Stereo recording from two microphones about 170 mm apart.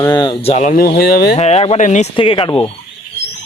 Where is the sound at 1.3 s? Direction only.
40° left (ahead or behind).